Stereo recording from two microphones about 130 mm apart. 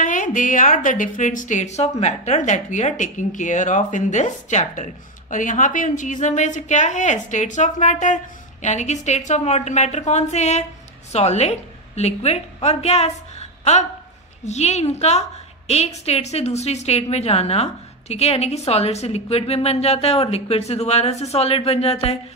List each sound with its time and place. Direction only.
0.0 s a woman's voice: 85° left; by 4.8 s 65° left (ahead or behind)
5.3 s a woman's voice: 80° left; by 22.2 s 50° left (ahead or behind)